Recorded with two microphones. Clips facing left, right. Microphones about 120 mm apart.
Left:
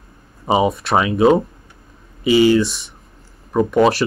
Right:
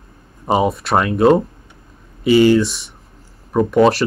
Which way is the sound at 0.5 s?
Centre (ahead or behind).